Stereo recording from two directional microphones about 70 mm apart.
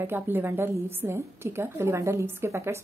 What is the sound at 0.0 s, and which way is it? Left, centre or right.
A woman's voice, right.